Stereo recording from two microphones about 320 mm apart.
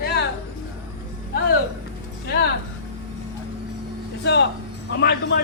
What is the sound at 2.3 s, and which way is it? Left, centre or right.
Speech, left.